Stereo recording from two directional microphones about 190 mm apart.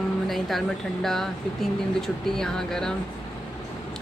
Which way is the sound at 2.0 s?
Centre (ahead or behind).